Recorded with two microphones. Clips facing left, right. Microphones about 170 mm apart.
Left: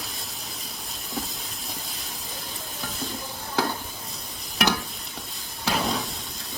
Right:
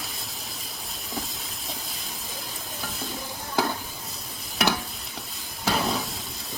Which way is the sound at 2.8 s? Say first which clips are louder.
Left 2 dB; centre (ahead or behind).